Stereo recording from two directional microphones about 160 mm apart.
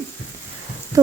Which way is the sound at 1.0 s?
20° right (ahead or behind).